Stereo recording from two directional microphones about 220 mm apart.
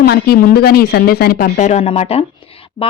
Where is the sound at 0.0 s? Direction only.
45° left (ahead or behind).